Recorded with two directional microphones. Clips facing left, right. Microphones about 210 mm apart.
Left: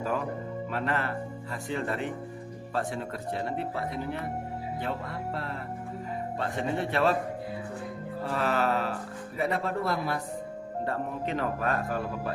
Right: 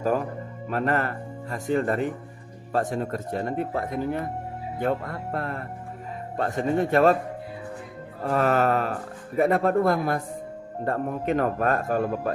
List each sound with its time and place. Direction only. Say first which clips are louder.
0.0 s speech: right 5 dB; 45° right (ahead or behind)
8.2 s speech: right 6 dB; 50° right (ahead or behind)